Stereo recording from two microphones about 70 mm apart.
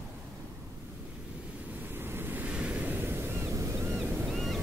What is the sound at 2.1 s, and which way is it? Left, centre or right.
Waves, right.